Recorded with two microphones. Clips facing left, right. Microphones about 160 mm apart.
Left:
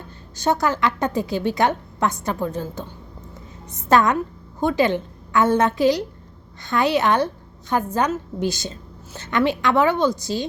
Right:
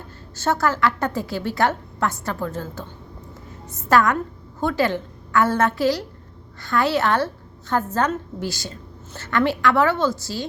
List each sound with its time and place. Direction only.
0.3 s a woman's voice: 15° left (ahead or behind)
3.8 s a woman's voice: 20° left (ahead or behind)